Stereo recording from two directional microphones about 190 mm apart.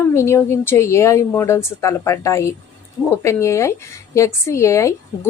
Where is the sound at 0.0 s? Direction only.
15° left (ahead or behind).